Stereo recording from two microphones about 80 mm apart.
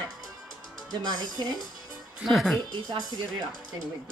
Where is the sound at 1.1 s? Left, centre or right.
Right.